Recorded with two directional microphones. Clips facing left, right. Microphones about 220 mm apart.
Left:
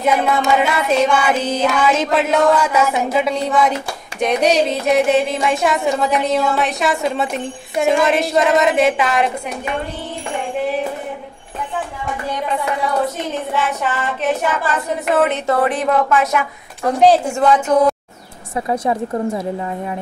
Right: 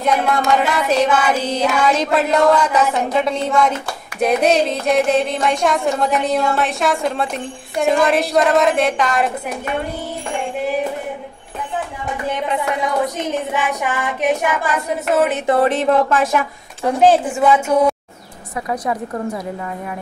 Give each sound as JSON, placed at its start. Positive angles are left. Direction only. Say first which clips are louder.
{"t": 0.0, "sound": "a sound", "louder": "left 1 dB", "side_deg": 0}
{"t": 12.8, "sound": "child singing", "louder": "even", "side_deg": -15}
{"t": 15.1, "sound": "a sound", "louder": "even", "side_deg": 0}
{"t": 15.4, "sound": "speech", "louder": "right 2 dB", "side_deg": -25}
{"t": 16.8, "sound": "child singing", "louder": "left 1 dB", "side_deg": -5}
{"t": 18.7, "sound": "a woman's voice", "louder": "left 3 dB", "side_deg": 25}